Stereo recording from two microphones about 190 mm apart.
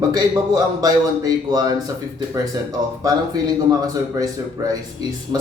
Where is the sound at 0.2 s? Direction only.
20° right (ahead or behind).